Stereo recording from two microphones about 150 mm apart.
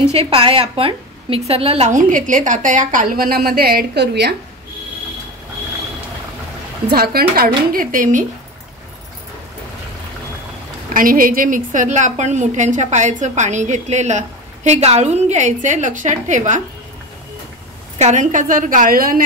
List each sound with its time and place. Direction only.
0.0 s a woman's voice: 40° right (ahead or behind); by 4.4 s 90° right
6.9 s speech: 90° right; by 8.3 s 60° right (ahead or behind)
10.9 s a woman's voice: 65° right (ahead or behind)
17.9 s a woman's voice: 55° right (ahead or behind); by 19.2 s 70° right (ahead or behind)